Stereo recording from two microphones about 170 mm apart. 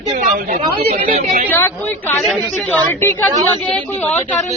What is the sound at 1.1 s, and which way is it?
Speech, 45° right (ahead or behind).